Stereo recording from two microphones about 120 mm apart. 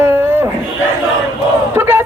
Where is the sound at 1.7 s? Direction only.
20° right (ahead or behind).